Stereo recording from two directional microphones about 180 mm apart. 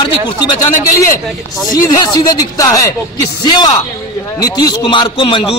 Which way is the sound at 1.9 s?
20° left (ahead or behind).